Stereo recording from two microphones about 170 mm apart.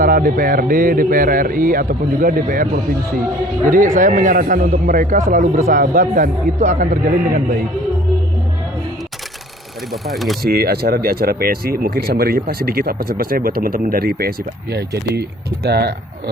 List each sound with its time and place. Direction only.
0.0 s speech: 55° right (ahead or behind)
3.7 s a man's voice: 55° right (ahead or behind)
9.9 s speech: centre (ahead or behind)
10.4 s speech: 65° right (ahead or behind)